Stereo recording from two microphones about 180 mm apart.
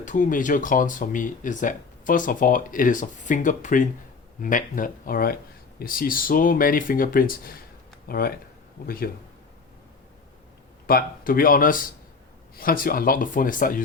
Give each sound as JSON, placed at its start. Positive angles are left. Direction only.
{"t": 0.0, "sound": "speech", "side_deg": 45}
{"t": 10.8, "sound": "speech", "side_deg": 55}